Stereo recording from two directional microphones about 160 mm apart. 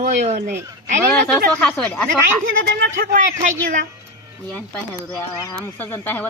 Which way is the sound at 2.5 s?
60° right (ahead or behind).